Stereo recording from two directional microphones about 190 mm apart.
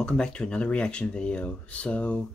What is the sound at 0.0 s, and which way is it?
Speech, 5° left (ahead or behind).